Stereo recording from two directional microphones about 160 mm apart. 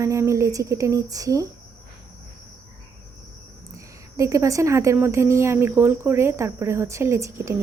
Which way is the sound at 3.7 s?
20° right (ahead or behind).